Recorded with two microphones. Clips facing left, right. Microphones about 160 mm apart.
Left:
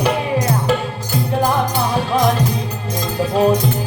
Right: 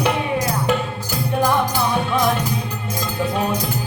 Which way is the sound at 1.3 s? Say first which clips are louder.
Left 1 dB; 30° left (ahead or behind).